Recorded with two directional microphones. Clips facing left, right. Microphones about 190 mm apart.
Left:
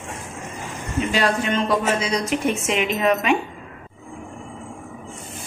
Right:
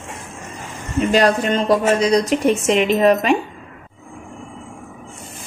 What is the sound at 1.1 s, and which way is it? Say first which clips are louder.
A woman's voice: right 6 dB; 40° right (ahead or behind).